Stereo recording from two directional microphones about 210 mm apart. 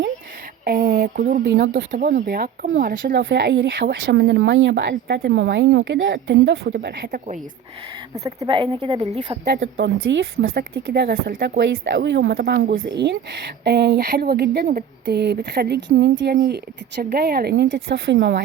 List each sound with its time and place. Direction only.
0.6 s speech: 50° right (ahead or behind)
1.5 s speech: 50° right (ahead or behind)
8.1 s speech: 15° right (ahead or behind)
9.6 s speech: 60° right (ahead or behind)